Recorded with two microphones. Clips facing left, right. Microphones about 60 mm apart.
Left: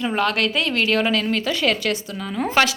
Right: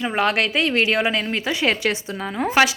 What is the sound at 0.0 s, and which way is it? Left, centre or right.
A woman's voice, centre.